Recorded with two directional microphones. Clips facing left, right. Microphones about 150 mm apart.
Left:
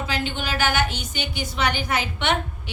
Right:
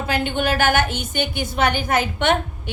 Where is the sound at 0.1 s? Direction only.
50° right (ahead or behind).